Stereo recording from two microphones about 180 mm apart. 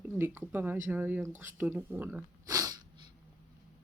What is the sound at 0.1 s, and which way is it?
Speech, 10° right (ahead or behind).